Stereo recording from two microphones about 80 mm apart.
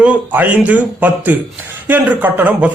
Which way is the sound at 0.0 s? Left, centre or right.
Centre.